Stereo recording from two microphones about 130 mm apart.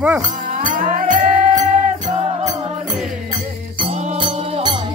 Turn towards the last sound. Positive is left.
turn(degrees=-60)  # may be behind; listen again after turning